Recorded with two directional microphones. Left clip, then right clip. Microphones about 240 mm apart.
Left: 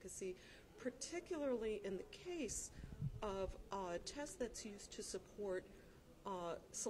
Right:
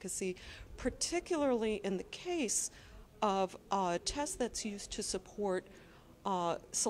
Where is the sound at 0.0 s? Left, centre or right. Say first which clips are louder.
Right 9 dB; right.